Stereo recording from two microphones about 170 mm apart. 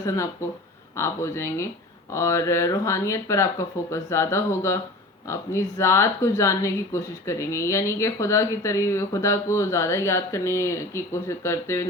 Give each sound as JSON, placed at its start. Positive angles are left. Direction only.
{"t": 0.9, "sound": "a woman's voice", "side_deg": 15}